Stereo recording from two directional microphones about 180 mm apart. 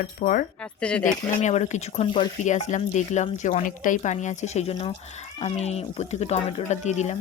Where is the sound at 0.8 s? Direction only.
5° left (ahead or behind).